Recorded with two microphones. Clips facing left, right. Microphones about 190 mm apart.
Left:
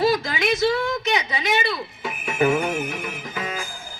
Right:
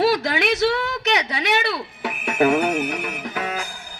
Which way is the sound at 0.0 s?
65° right (ahead or behind).